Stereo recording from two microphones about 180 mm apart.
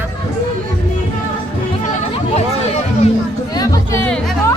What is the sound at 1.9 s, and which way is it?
Chatter, 40° left (ahead or behind).